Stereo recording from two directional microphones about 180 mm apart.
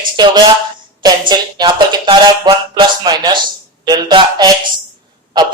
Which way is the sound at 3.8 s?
20° right (ahead or behind).